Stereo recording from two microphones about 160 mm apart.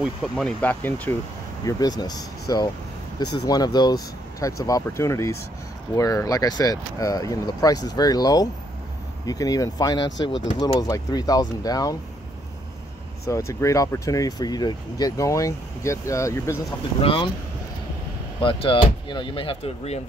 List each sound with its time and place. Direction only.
0.0 s speech: centre (ahead or behind)
1.6 s speech: 25° left (ahead or behind)
13.3 s speech: 20° left (ahead or behind)
17.0 s speech: 35° left (ahead or behind)
18.4 s speech: 35° left (ahead or behind)